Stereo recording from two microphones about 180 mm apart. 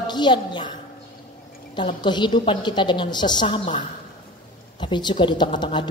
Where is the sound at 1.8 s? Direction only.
25° left (ahead or behind).